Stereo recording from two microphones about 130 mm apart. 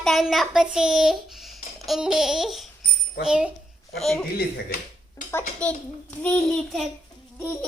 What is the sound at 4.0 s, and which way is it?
Child singing, 5° left (ahead or behind).